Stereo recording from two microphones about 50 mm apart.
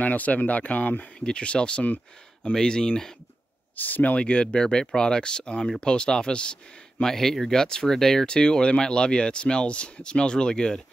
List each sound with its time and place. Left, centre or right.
0.0 s speech: left; by 3.2 s centre
3.7 s speech: left; by 7.1 s centre
7.1 s speech: centre